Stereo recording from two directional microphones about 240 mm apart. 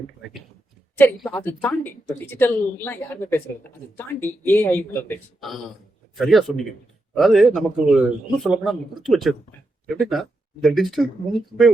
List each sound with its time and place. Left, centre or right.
0.9 s speech: centre